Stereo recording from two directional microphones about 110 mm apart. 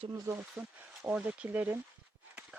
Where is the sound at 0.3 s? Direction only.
15° right (ahead or behind).